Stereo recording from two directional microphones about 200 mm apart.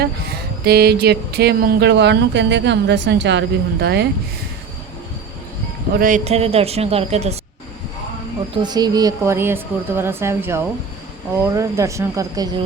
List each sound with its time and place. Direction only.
0.0 s a sound: 50° right (ahead or behind)
6.0 s speech: 40° right (ahead or behind)
8.6 s speech: 20° right (ahead or behind)